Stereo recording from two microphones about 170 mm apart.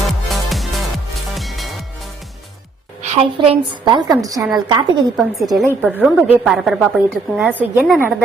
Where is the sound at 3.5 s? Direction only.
30° right (ahead or behind).